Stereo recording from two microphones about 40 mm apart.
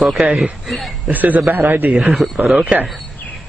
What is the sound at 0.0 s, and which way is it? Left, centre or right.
Speech, centre.